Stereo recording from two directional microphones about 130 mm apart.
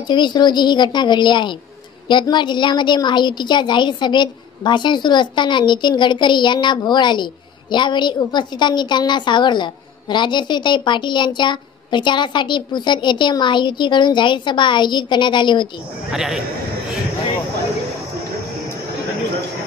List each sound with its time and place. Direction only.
0.1 s a woman's voice: 35° left (ahead or behind)
16.1 s speech: 5° right (ahead or behind)